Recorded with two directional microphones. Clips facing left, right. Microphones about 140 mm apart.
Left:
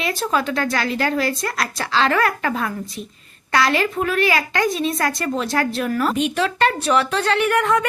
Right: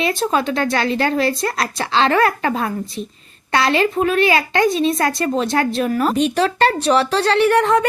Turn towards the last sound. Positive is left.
turn(degrees=-30)  # may be behind; listen again after turning